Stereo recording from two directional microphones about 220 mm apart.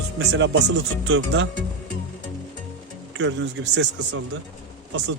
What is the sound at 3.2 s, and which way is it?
Speech, 55° right (ahead or behind).